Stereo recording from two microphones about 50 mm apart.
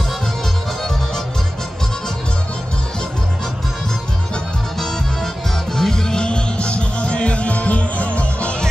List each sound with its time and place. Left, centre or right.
5.8 s music: centre